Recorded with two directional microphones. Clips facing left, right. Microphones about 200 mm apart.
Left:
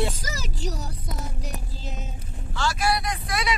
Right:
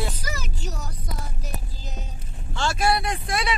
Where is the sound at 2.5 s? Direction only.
25° right (ahead or behind).